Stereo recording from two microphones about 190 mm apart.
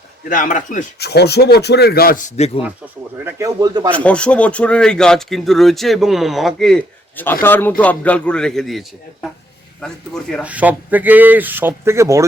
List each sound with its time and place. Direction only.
0.3 s speech: 45° left (ahead or behind)
0.9 s speech: 60° left (ahead or behind); by 2.5 s 40° left (ahead or behind)
3.2 s speech: 15° right (ahead or behind)
3.9 s speech: 5° left (ahead or behind)
10.4 s speech: 10° right (ahead or behind)